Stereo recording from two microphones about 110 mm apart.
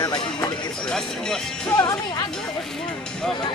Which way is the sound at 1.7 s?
35° left (ahead or behind).